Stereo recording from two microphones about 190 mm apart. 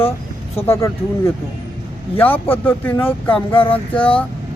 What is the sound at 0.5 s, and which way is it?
Speech, 15° left (ahead or behind).